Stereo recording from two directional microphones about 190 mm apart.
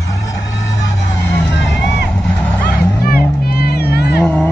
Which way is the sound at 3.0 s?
50° left (ahead or behind).